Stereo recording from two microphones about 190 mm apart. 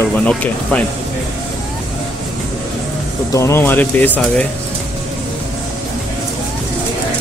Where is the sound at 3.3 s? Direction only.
15° left (ahead or behind).